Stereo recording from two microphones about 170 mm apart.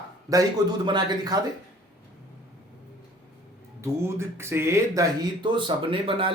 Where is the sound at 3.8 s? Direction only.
15° right (ahead or behind).